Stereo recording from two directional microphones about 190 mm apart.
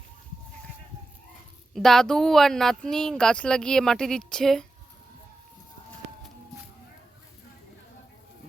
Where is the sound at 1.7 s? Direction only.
Centre (ahead or behind).